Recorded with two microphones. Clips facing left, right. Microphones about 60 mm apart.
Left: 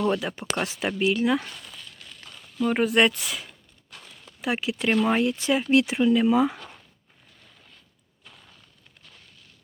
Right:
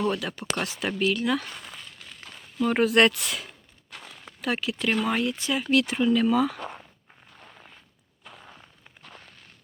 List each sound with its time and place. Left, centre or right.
0.1 s speech: left
2.6 s speech: centre
4.4 s speech: centre
6.6 s walk: right
7.3 s a sound: right
8.4 s a sound: right
9.0 s walk: right